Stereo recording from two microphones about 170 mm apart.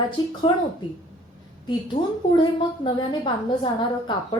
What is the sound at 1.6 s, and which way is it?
A woman's voice, 25° left (ahead or behind).